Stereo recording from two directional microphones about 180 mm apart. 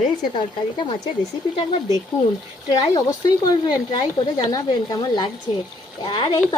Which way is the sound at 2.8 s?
20° left (ahead or behind).